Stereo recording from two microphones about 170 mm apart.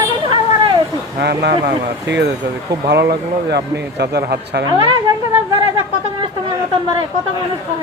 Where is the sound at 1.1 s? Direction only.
75° right (ahead or behind); by 2.3 s 90° right.